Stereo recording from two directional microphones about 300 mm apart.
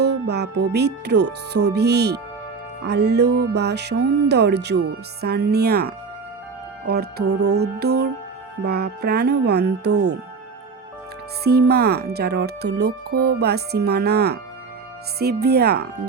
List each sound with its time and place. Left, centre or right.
0.0 s speech: right
6.8 s music: right
7.3 s music: right
7.6 s speech: right
11.7 s speech: right